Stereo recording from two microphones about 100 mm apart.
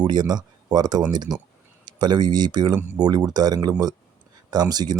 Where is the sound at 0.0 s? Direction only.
45° right (ahead or behind).